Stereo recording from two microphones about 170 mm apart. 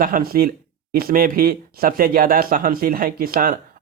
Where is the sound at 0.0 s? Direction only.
60° right (ahead or behind).